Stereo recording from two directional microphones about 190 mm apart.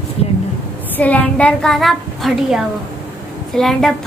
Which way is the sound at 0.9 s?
10° left (ahead or behind).